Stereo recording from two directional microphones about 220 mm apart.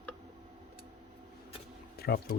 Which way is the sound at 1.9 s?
45° left (ahead or behind).